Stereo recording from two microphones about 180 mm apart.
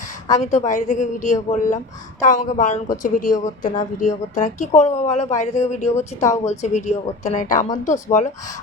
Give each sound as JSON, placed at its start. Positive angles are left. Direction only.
{"t": 0.3, "sound": "a woman's voice", "side_deg": 40}
{"t": 6.1, "sound": "a woman's voice", "side_deg": 15}
{"t": 6.5, "sound": "speech", "side_deg": 40}